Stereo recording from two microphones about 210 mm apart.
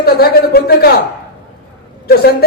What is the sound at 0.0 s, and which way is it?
Speech, 45° left (ahead or behind).